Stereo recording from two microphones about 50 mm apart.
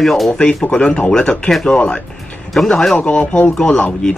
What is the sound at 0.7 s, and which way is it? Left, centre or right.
Speech, centre.